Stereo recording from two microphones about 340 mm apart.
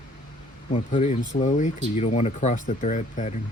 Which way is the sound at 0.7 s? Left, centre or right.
Left.